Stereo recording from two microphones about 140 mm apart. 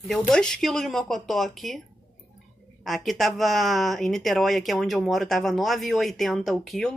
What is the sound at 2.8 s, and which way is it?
Speech, centre (ahead or behind).